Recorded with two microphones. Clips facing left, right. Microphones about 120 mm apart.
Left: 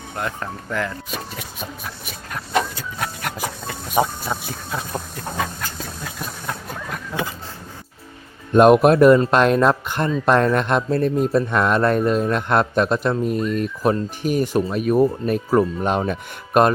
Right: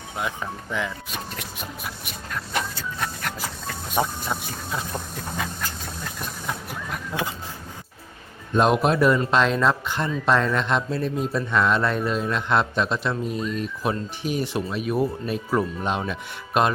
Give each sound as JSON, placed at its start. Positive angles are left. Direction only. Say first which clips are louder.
{"t": 0.2, "sound": "speech", "louder": "left 2 dB", "side_deg": -5}
{"t": 3.3, "sound": "a sound", "louder": "left 4 dB", "side_deg": 5}
{"t": 6.1, "sound": "vehicle", "louder": "even", "side_deg": 0}
{"t": 8.5, "sound": "a man's voice", "louder": "left 8 dB", "side_deg": 55}